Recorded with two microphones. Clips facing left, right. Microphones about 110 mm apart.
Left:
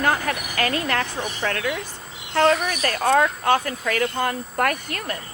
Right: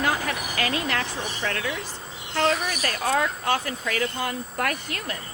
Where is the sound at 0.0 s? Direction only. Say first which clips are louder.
Left 3 dB; 45° left (ahead or behind).